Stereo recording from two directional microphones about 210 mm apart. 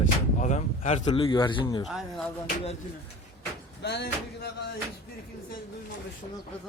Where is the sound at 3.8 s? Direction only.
50° left (ahead or behind).